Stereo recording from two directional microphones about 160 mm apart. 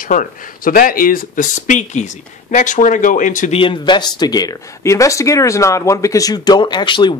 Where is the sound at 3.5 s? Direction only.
30° left (ahead or behind).